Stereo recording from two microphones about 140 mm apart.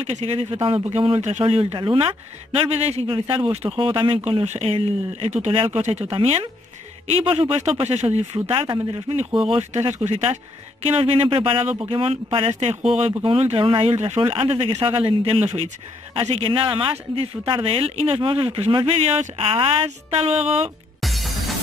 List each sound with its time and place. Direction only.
0.0 s speech: 45° right (ahead or behind)
8.5 s speech: 35° right (ahead or behind)
9.5 s speech: 50° right (ahead or behind)
21.0 s music: centre (ahead or behind)